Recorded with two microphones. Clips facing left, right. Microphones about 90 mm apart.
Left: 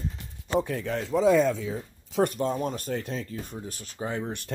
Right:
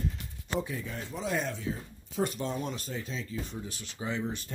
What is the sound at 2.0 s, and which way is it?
Speech, 90° left.